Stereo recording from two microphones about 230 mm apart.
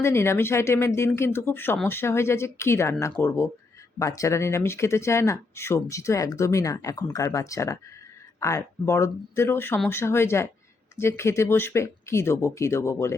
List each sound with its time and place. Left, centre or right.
0.0 s speech: centre